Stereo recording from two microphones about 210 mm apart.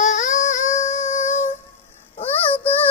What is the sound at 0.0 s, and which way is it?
Music, 35° left (ahead or behind).